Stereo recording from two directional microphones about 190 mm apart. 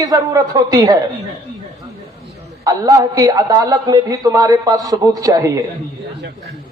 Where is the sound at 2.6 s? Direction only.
20° right (ahead or behind).